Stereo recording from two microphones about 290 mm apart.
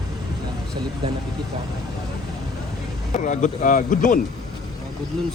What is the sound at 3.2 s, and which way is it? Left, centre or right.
Speech, left.